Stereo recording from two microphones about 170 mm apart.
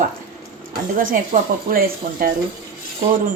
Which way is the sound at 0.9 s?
55° right (ahead or behind).